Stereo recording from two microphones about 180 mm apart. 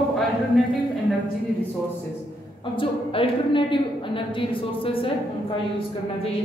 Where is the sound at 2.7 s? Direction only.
30° left (ahead or behind).